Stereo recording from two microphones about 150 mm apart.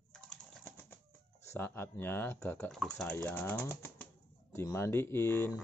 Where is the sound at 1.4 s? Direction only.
15° left (ahead or behind).